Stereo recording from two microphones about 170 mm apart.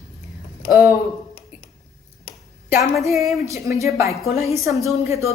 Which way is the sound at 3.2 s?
Centre (ahead or behind).